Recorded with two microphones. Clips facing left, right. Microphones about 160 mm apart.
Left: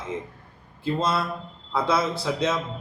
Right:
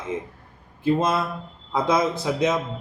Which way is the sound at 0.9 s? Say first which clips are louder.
Right 2 dB; 15° right (ahead or behind).